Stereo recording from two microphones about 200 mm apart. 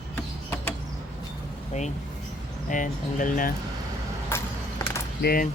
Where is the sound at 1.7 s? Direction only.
35° left (ahead or behind).